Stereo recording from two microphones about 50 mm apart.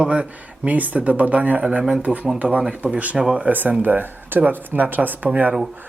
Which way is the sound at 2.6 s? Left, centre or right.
Centre.